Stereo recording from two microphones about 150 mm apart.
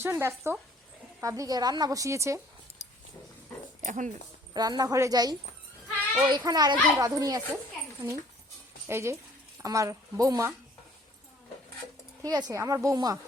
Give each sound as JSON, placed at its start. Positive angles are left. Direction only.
{"t": 0.0, "sound": "a woman's voice", "side_deg": -15}
{"t": 3.8, "sound": "speech", "side_deg": -55}
{"t": 4.5, "sound": "a woman's voice", "side_deg": -25}
{"t": 8.9, "sound": "a woman's voice", "side_deg": -15}
{"t": 12.2, "sound": "a woman's voice", "side_deg": -25}